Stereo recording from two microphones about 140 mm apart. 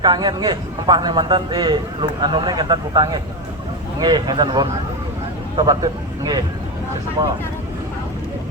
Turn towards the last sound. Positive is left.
turn(degrees=-30)  # may be behind; listen again after turning